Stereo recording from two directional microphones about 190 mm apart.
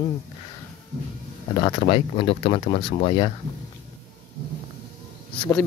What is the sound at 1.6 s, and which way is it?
Speech, 25° left (ahead or behind).